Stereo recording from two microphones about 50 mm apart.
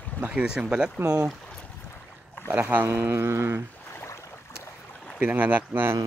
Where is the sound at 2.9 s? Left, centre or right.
Right.